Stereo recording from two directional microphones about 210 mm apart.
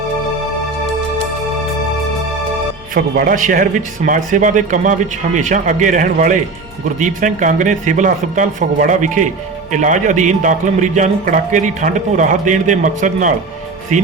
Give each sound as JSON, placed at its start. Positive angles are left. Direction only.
{"t": 2.9, "sound": "a man's voice", "side_deg": -40}